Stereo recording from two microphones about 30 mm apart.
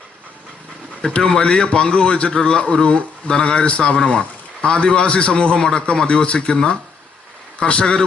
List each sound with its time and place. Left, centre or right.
1.0 s a man's voice: left
3.9 s a man's voice: left